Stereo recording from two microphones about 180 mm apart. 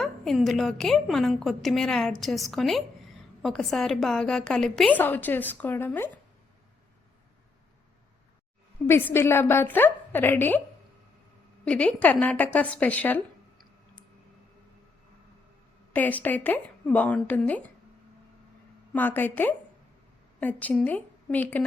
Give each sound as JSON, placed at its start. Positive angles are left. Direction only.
{"t": 0.0, "sound": "a woman's voice", "side_deg": 0}
{"t": 8.9, "sound": "a woman's voice", "side_deg": 10}
{"t": 11.6, "sound": "a woman's voice", "side_deg": 5}
{"t": 15.9, "sound": "a woman's voice", "side_deg": 10}
{"t": 18.9, "sound": "a woman's voice", "side_deg": 10}